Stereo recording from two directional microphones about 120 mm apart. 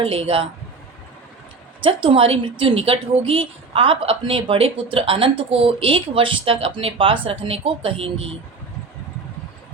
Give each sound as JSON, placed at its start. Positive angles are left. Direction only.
{"t": 0.0, "sound": "a woman's voice", "side_deg": -55}
{"t": 1.8, "sound": "a woman's voice", "side_deg": -45}